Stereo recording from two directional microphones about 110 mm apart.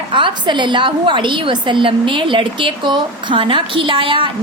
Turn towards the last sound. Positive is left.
turn(degrees=-50)  # may be behind; listen again after turning